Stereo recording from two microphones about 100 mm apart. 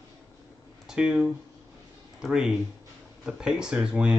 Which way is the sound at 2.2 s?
5° right (ahead or behind).